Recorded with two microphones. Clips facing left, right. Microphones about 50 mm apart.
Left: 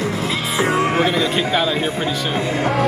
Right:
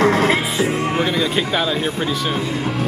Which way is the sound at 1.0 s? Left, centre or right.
Centre.